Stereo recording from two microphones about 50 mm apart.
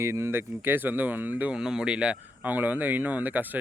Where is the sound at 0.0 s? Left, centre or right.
Right.